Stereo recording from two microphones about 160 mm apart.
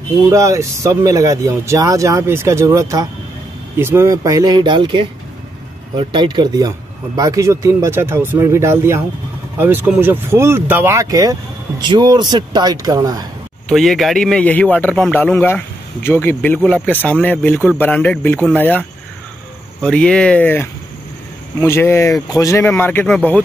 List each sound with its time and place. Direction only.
0.3 s speech: 20° right (ahead or behind)
13.7 s a man's voice: centre (ahead or behind)